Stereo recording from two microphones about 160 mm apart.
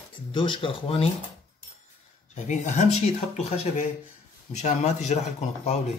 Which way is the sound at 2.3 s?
45° left (ahead or behind).